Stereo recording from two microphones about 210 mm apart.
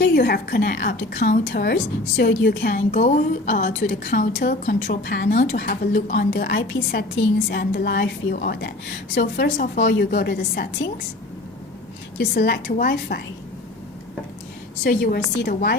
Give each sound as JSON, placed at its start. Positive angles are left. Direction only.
{"t": 0.0, "sound": "a woman's voice", "side_deg": 45}
{"t": 12.1, "sound": "a woman's voice", "side_deg": 50}
{"t": 14.8, "sound": "a woman's voice", "side_deg": 45}